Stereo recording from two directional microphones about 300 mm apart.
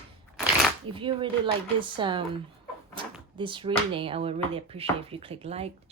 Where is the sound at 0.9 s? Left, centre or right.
Centre.